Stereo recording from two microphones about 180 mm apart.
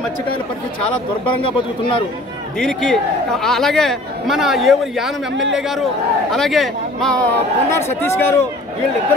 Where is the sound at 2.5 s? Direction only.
Centre (ahead or behind).